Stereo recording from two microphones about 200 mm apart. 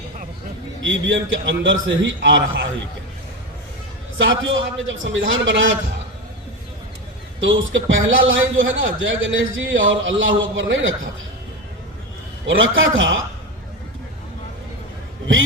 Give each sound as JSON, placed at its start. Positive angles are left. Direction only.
{"t": 0.8, "sound": "a man's voice", "side_deg": -70}
{"t": 4.2, "sound": "a man's voice", "side_deg": -70}
{"t": 7.4, "sound": "a man's voice", "side_deg": -70}
{"t": 12.5, "sound": "a man's voice", "side_deg": -75}